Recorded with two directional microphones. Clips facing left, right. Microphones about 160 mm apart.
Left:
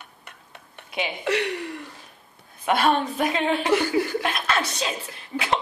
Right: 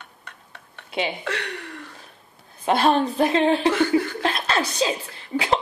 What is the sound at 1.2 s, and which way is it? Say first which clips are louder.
Speech: left 5 dB; 10° left (ahead or behind).